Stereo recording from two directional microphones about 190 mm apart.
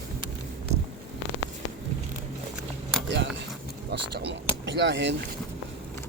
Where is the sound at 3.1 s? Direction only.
65° right (ahead or behind).